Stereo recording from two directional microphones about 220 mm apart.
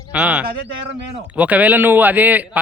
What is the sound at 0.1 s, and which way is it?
A man's voice, 5° right (ahead or behind).